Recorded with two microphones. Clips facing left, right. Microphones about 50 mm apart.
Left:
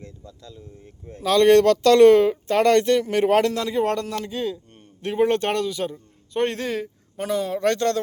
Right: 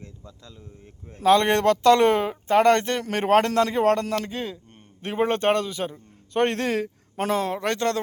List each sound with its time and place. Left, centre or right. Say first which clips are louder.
0.0 s a sound: left 3 dB; right
1.1 s speech: left 3 dB; right
6.3 s a man's voice: right 1 dB; right
7.3 s speech: left 1 dB; right
7.6 s speech: left 3 dB; centre